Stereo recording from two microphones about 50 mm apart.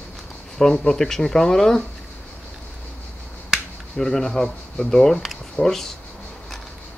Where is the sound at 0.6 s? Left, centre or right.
Centre.